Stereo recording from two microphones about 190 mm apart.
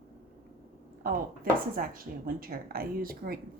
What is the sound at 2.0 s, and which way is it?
Speech, 50° right (ahead or behind).